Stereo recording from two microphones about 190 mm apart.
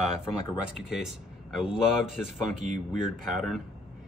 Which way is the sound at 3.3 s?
Centre (ahead or behind).